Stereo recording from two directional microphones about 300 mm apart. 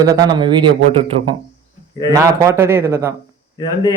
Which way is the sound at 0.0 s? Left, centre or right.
Centre.